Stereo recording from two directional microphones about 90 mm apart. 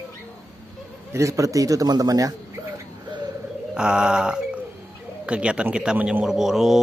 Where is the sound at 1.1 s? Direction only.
35° right (ahead or behind).